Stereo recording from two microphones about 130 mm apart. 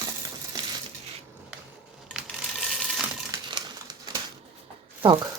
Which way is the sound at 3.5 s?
35° right (ahead or behind).